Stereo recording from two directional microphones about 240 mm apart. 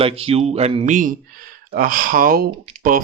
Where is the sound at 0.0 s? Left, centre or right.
Right.